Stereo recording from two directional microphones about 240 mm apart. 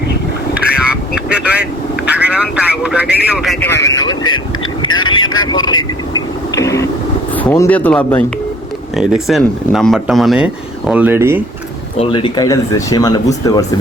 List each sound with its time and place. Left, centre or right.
0.5 s vehicle: centre
2.0 s speech: centre
3.9 s speech: centre
5.1 s vehicle: left
5.5 s speech: centre
6.1 s a sound: centre
7.3 s speech: centre
11.9 s speech: left